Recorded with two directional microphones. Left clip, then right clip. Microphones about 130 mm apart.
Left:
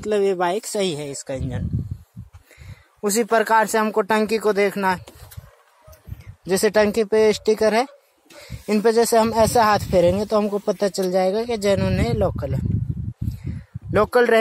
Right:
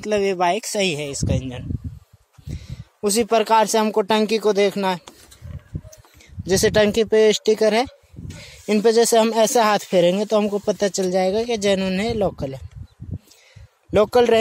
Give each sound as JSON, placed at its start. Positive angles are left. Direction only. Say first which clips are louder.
{"t": 0.0, "sound": "speech", "louder": "even", "side_deg": -10}
{"t": 3.0, "sound": "speech", "louder": "right 1 dB", "side_deg": -10}
{"t": 3.6, "sound": "speech", "louder": "right 1 dB", "side_deg": -25}
{"t": 6.4, "sound": "speech", "louder": "right 1 dB", "side_deg": -35}
{"t": 13.9, "sound": "speech", "louder": "right 1 dB", "side_deg": -25}